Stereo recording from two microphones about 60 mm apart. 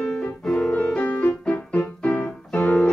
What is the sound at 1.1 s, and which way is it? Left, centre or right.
Music, left.